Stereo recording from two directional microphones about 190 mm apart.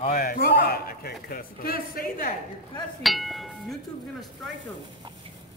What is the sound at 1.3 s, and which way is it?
A woman's voice, 50° left (ahead or behind).